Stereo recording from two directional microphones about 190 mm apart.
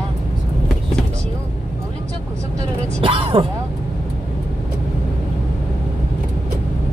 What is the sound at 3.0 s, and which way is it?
Music, 25° right (ahead or behind).